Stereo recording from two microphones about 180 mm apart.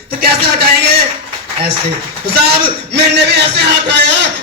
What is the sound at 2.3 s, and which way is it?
A man's voice, 65° right (ahead or behind).